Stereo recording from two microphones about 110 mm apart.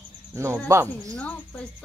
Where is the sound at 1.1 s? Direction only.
10° left (ahead or behind).